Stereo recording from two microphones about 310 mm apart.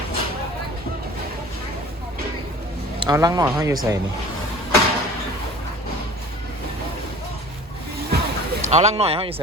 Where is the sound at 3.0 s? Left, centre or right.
Centre.